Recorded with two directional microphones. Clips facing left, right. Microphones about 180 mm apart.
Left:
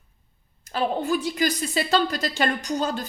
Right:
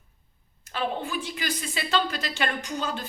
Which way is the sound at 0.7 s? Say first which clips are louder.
Left 6 dB; 40° left (ahead or behind).